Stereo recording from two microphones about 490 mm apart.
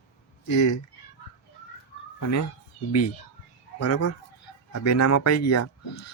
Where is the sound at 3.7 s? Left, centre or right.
Left.